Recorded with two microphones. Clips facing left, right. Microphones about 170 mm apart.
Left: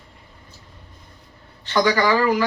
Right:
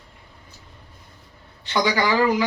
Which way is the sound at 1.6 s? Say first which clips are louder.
Left 3 dB; 15° right (ahead or behind).